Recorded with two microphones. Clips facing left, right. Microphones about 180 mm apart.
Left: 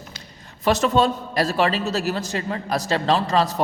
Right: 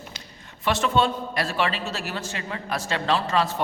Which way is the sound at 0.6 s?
40° left (ahead or behind).